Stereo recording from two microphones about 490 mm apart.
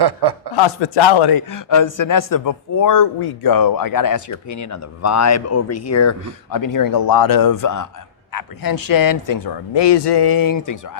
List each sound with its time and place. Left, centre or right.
0.0 s chuckle: right
0.9 s speech: left
9.7 s speech: left